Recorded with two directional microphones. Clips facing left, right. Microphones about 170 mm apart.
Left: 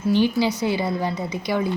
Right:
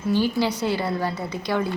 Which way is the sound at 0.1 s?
20° left (ahead or behind).